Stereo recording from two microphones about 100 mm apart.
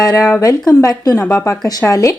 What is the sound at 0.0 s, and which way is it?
A woman's voice, 40° left (ahead or behind).